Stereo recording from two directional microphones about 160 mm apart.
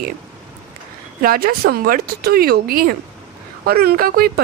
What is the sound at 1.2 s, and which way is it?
A woman's voice, 70° right (ahead or behind).